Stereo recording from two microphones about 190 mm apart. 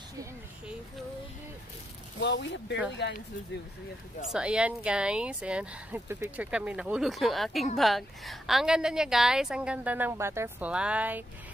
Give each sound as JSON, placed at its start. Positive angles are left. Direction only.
{"t": 2.1, "sound": "speech", "side_deg": 65}
{"t": 4.3, "sound": "speech", "side_deg": -5}